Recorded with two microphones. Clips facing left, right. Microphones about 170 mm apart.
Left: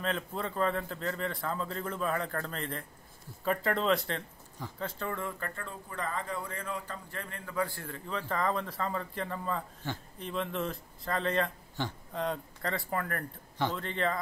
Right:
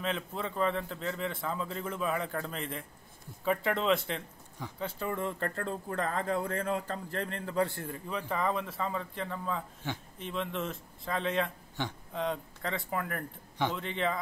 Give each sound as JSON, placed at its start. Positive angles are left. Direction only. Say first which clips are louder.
{"t": 0.0, "sound": "a man's voice", "louder": "even", "side_deg": 0}
{"t": 5.4, "sound": "speech", "louder": "right 6 dB", "side_deg": -35}
{"t": 5.9, "sound": "a man's voice", "louder": "right 3 dB", "side_deg": -45}